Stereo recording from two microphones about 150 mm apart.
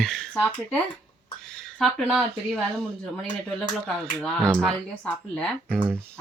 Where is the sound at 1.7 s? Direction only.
Centre (ahead or behind).